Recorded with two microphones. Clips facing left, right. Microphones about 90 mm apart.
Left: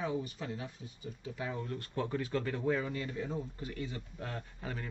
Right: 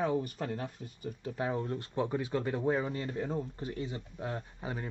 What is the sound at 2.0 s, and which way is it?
Speech, 20° right (ahead or behind).